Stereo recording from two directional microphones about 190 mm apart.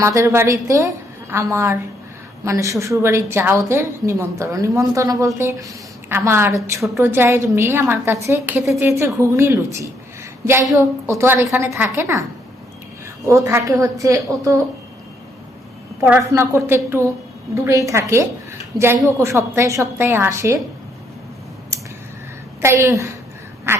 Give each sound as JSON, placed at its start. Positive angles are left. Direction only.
{"t": 0.0, "sound": "a woman's voice", "side_deg": -15}
{"t": 13.2, "sound": "a woman's voice", "side_deg": -15}
{"t": 16.0, "sound": "a woman's voice", "side_deg": -10}
{"t": 22.6, "sound": "a woman's voice", "side_deg": -15}